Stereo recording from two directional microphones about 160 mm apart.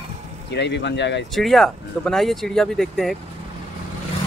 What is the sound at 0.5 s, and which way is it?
Speech, 90° left.